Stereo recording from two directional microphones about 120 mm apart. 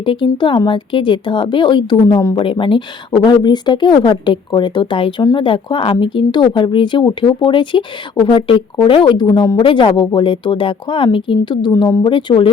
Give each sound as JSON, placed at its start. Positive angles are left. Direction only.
{"t": 0.0, "sound": "speech", "side_deg": 45}